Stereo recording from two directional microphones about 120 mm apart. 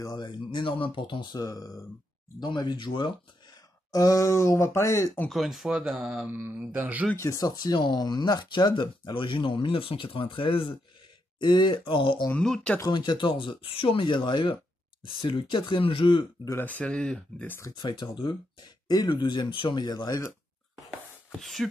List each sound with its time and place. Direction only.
0.0 s speech: 35° left (ahead or behind)
3.9 s speech: 30° left (ahead or behind)
5.3 s speech: centre (ahead or behind)
6.3 s speech: 20° right (ahead or behind)
7.2 s speech: 30° left (ahead or behind); by 12.3 s 45° left (ahead or behind)
12.3 s speech: 5° left (ahead or behind)
12.8 s speech: 40° left (ahead or behind)
16.4 s speech: 15° left (ahead or behind)
17.6 s speech: 25° left (ahead or behind)
17.8 s speech: 40° left (ahead or behind)
21.4 s speech: centre (ahead or behind)